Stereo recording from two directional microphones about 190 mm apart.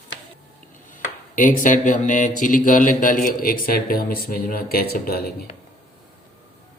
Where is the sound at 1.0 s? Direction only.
45° left (ahead or behind).